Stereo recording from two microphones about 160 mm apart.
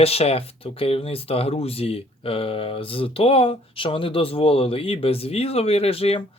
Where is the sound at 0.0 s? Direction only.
40° left (ahead or behind).